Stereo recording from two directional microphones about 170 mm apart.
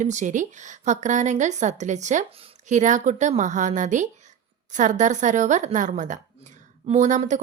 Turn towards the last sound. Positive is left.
turn(degrees=-45)  # may be behind; listen again after turning